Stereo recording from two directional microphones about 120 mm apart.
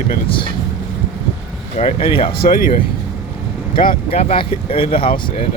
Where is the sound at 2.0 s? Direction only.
50° left (ahead or behind).